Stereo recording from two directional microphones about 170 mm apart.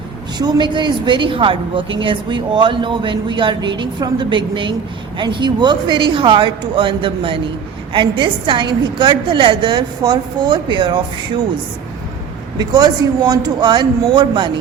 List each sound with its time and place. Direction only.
0.3 s a woman's voice: 25° right (ahead or behind)
12.5 s a woman's voice: 25° right (ahead or behind)